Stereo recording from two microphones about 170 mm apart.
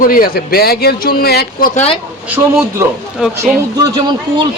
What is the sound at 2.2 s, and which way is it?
Speech, 15° right (ahead or behind).